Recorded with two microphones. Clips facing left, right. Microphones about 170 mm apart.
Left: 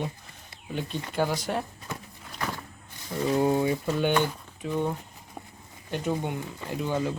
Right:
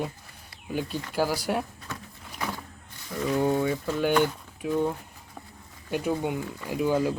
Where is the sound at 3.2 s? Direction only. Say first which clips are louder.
Left 1 dB; 25° left (ahead or behind).